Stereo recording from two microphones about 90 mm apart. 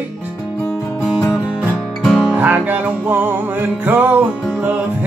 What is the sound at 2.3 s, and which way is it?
Music, 20° right (ahead or behind).